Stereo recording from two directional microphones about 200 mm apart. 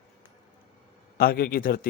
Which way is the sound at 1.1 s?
50° left (ahead or behind).